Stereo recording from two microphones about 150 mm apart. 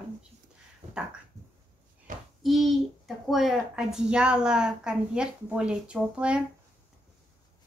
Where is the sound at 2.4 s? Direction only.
Centre (ahead or behind).